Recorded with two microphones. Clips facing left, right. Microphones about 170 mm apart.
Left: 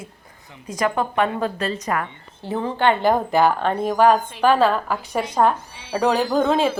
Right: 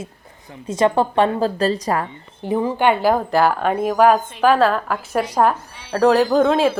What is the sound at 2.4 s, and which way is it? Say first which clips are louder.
A woman's voice: right 3 dB; 15° right (ahead or behind).